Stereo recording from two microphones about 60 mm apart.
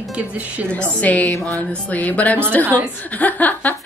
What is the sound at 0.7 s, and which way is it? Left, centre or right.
A woman's voice, left.